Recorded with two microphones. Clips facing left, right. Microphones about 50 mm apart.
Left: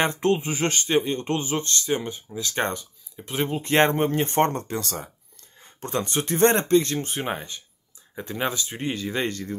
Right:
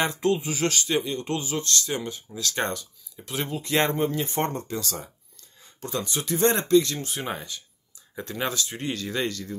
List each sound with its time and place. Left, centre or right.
0.0 s speech: left; by 9.2 s centre
9.2 s speech: left